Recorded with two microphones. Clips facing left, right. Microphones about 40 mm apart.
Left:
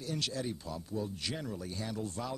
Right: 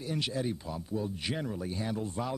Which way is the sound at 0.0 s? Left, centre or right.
Right.